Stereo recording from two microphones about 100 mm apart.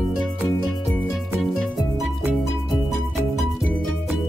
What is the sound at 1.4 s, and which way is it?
Music, centre (ahead or behind).